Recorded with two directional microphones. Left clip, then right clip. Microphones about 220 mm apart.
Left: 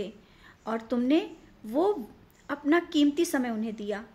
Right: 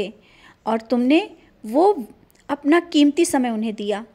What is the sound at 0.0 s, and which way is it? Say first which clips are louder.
A woman's voice: right 9 dB; 35° right (ahead or behind).